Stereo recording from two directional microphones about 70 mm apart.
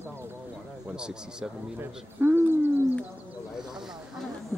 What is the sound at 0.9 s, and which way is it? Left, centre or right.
Speech, centre.